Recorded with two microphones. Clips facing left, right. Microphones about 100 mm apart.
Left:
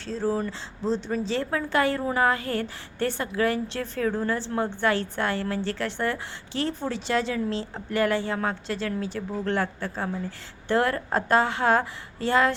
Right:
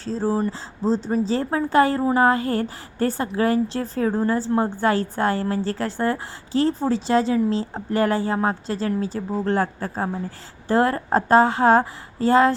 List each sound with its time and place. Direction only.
0.0 s speech: 35° right (ahead or behind)